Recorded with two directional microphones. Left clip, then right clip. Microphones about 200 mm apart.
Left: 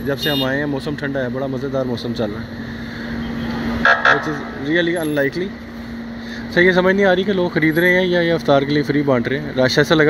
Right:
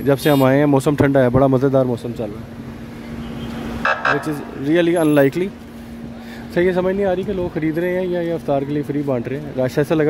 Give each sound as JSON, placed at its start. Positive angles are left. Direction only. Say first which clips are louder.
{"t": 0.0, "sound": "speech", "louder": "right 5 dB", "side_deg": -30}
{"t": 3.8, "sound": "vehicle", "louder": "left 5 dB", "side_deg": -20}
{"t": 4.6, "sound": "speech", "louder": "right 3 dB", "side_deg": -25}
{"t": 6.5, "sound": "speech", "louder": "left 4 dB", "side_deg": -10}